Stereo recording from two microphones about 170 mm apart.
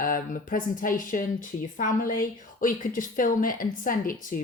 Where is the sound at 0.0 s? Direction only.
55° left (ahead or behind).